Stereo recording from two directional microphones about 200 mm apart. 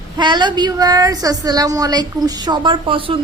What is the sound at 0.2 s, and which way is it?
A woman's voice, 25° right (ahead or behind).